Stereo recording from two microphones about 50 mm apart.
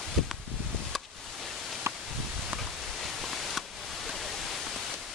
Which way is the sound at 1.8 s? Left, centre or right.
Right.